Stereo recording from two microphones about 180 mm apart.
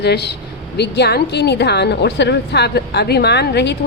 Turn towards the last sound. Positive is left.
turn(degrees=70)  # may be behind; listen again after turning